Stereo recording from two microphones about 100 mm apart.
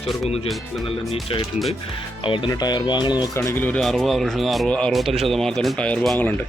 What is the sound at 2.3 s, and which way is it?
Speech, 50° left (ahead or behind).